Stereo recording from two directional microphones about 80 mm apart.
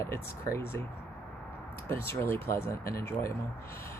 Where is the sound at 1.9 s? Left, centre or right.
Left.